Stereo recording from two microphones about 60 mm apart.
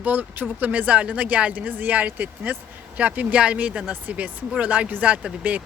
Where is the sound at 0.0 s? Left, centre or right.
Right.